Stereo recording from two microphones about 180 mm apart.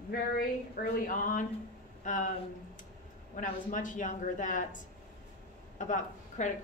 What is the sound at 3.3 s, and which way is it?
A woman's voice, 45° left (ahead or behind).